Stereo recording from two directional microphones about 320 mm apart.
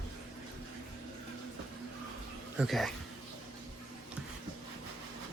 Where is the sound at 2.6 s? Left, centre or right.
Centre.